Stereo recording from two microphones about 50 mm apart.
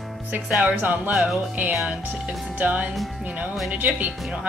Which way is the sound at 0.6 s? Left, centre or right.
Right.